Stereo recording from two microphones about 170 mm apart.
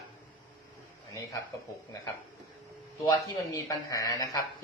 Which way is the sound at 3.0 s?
25° left (ahead or behind).